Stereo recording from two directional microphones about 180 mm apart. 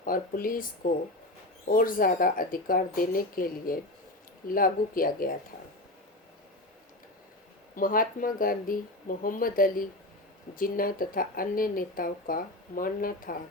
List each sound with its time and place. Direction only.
0.0 s speech: 50° left (ahead or behind)
1.6 s speech: 50° left (ahead or behind)
7.8 s speech: 50° left (ahead or behind)